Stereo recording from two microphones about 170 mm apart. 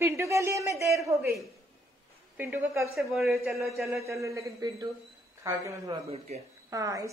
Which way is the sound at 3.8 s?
15° right (ahead or behind).